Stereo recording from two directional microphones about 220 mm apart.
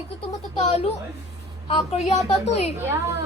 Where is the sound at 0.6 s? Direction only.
30° left (ahead or behind).